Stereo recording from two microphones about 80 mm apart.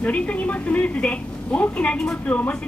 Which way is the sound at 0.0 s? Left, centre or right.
Centre.